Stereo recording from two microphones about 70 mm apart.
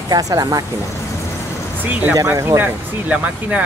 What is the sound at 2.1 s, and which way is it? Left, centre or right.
Speech, right.